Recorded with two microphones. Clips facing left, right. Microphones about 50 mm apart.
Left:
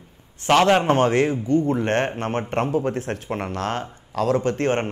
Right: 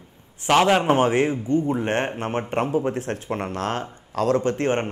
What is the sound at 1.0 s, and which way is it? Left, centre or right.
A man's voice, centre.